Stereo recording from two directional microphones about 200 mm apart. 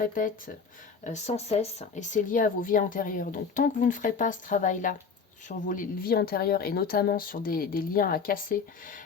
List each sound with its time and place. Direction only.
0.0 s speech: 45° left (ahead or behind)